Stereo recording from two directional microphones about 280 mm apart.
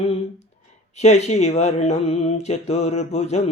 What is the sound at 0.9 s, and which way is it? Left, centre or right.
Speech, left.